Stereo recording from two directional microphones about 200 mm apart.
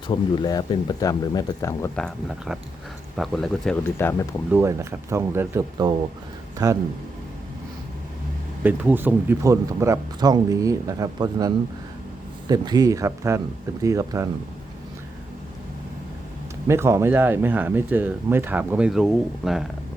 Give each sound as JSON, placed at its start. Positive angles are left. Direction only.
{"t": 0.1, "sound": "speech", "side_deg": 20}
{"t": 2.0, "sound": "speech", "side_deg": 5}
{"t": 3.9, "sound": "speech", "side_deg": 10}
{"t": 4.5, "sound": "speech", "side_deg": -15}
{"t": 8.6, "sound": "speech", "side_deg": -10}
{"t": 16.6, "sound": "speech", "side_deg": -15}